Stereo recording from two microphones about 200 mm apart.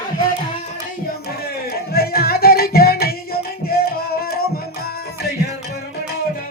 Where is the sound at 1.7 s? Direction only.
50° left (ahead or behind).